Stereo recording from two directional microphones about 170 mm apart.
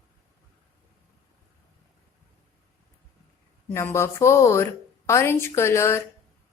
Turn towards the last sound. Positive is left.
turn(degrees=15)  # may be behind; listen again after turning